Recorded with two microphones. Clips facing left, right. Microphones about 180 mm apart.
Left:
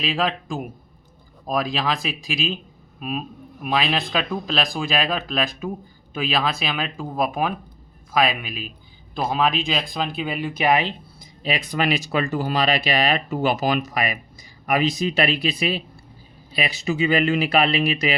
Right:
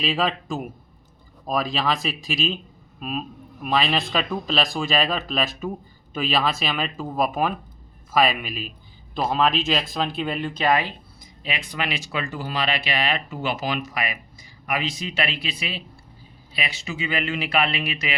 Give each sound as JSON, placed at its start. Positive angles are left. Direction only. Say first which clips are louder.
{"t": 0.0, "sound": "speech", "louder": "even", "side_deg": 0}
{"t": 10.7, "sound": "speech", "louder": "left 2 dB", "side_deg": 20}
{"t": 11.2, "sound": "speech", "louder": "left 6 dB", "side_deg": 35}